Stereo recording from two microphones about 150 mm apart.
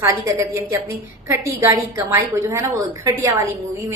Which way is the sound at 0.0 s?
20° right (ahead or behind).